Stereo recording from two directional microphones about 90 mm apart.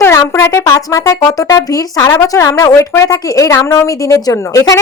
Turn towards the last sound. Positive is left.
turn(degrees=35)  # may be behind; listen again after turning